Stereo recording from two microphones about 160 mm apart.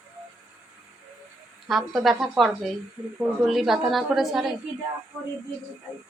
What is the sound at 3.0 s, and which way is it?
Speech, 20° right (ahead or behind).